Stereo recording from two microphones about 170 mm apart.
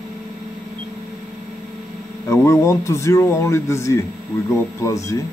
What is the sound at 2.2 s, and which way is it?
Speech, 15° left (ahead or behind).